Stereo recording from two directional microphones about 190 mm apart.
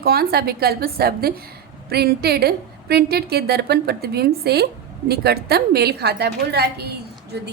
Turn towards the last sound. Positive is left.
turn(degrees=-60)  # may be behind; listen again after turning